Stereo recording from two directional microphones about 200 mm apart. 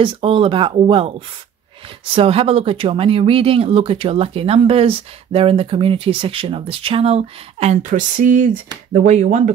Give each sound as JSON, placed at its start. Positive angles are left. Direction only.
{"t": 0.0, "sound": "speech", "side_deg": -25}
{"t": 2.1, "sound": "speech", "side_deg": -30}